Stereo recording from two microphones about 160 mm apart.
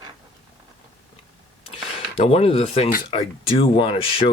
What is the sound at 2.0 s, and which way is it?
Speech, 35° left (ahead or behind).